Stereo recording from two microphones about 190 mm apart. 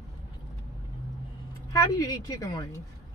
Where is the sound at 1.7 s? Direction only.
20° left (ahead or behind).